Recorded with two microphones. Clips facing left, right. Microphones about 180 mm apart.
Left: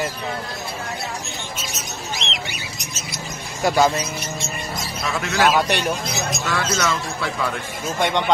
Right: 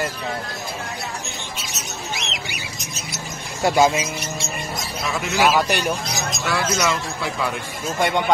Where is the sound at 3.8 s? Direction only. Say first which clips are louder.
Right 1 dB; 10° right (ahead or behind).